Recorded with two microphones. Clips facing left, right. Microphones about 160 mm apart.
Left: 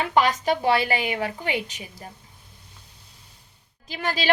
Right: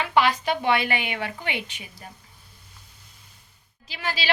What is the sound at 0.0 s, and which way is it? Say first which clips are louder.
A woman's voice: left 1 dB; 40° left (ahead or behind).